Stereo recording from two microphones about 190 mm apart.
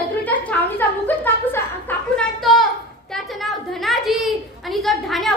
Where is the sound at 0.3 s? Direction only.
10° left (ahead or behind).